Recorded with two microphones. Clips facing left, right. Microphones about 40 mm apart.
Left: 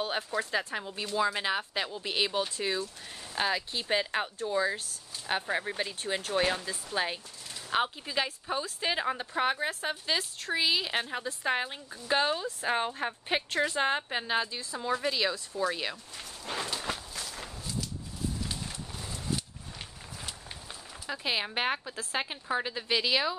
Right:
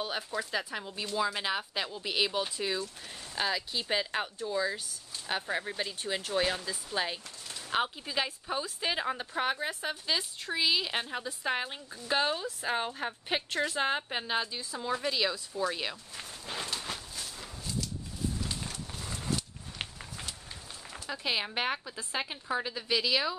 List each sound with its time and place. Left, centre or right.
0.0 s a woman's voice: centre
16.4 s a woman's voice: centre
18.5 s horse: centre
21.1 s a woman's voice: centre